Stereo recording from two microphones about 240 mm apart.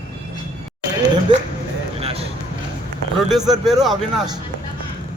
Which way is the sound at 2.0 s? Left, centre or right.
Right.